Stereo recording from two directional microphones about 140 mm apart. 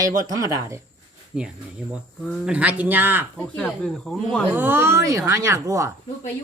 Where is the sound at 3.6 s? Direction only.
5° left (ahead or behind).